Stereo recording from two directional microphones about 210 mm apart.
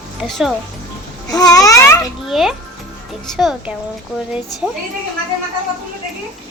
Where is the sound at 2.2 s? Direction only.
Centre (ahead or behind).